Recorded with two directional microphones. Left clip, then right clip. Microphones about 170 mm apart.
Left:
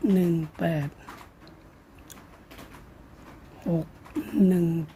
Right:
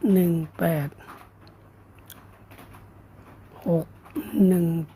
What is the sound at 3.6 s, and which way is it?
Speech, 25° right (ahead or behind).